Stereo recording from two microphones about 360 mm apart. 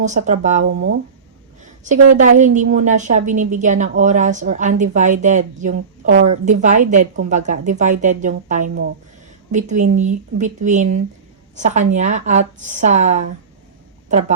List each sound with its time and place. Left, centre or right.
0.0 s speech: centre
1.6 s speech: centre